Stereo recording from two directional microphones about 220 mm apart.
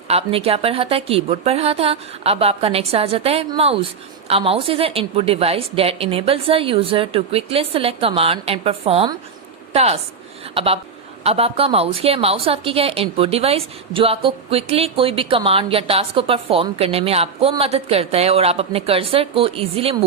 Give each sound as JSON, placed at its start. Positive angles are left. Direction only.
{"t": 0.1, "sound": "a woman's voice", "side_deg": -25}